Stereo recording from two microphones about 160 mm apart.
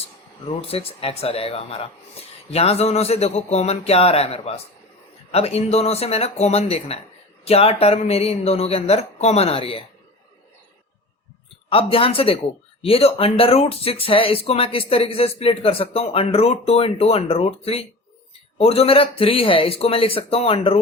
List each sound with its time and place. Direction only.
0.4 s speech: 35° left (ahead or behind)
11.7 s speech: 35° left (ahead or behind)